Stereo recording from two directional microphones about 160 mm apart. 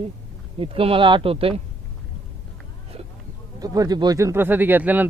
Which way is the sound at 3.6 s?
25° right (ahead or behind).